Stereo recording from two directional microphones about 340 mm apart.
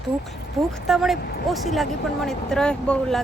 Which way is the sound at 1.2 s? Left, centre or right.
Left.